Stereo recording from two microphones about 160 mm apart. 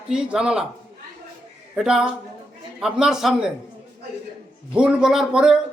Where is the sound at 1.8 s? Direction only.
5° right (ahead or behind).